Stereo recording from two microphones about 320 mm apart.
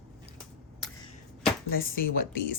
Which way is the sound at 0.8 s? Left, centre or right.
Centre.